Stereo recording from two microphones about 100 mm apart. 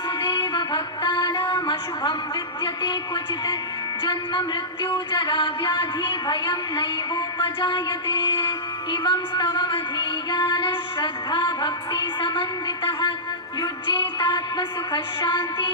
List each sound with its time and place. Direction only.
0.2 s music: 50° left (ahead or behind)
4.0 s speech: 50° left (ahead or behind)